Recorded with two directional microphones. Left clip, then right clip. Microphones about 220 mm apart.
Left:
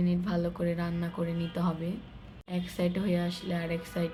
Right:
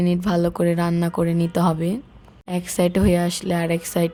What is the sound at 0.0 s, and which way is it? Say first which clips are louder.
Speech: right 11 dB; 55° right (ahead or behind).